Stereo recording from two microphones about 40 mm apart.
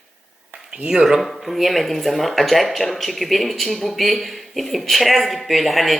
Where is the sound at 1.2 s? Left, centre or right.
Centre.